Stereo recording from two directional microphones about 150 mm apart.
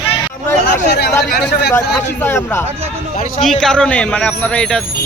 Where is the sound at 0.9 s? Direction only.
90° left.